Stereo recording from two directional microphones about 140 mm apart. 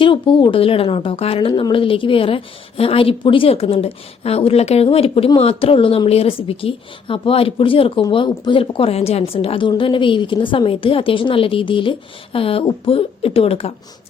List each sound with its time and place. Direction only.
0.0 s a woman's voice: 35° left (ahead or behind)